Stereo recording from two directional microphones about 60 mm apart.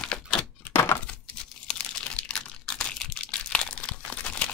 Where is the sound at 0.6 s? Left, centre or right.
Left.